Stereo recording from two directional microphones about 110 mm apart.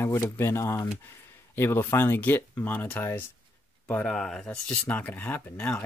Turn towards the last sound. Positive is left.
turn(degrees=15)  # may be behind; listen again after turning